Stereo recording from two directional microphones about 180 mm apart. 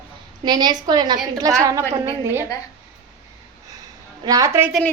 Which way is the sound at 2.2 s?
15° right (ahead or behind).